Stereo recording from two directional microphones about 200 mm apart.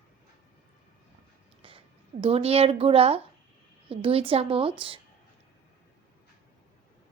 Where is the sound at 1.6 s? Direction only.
25° right (ahead or behind).